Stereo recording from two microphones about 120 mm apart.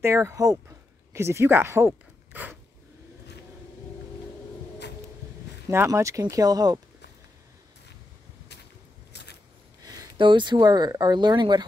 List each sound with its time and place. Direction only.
0.0 s speech: 25° right (ahead or behind)
5.7 s speech: 20° right (ahead or behind)
10.1 s speech: 40° right (ahead or behind)